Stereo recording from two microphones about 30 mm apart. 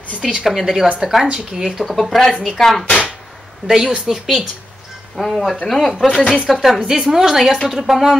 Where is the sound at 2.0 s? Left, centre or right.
Centre.